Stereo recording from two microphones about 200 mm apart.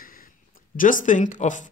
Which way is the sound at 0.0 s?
45° left (ahead or behind).